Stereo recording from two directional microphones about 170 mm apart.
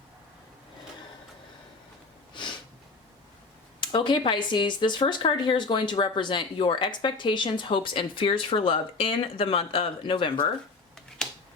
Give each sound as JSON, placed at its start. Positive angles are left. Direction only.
{"t": 3.8, "sound": "speech", "side_deg": 30}